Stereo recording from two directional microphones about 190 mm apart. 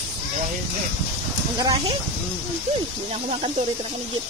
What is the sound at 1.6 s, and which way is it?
Speech, 20° right (ahead or behind).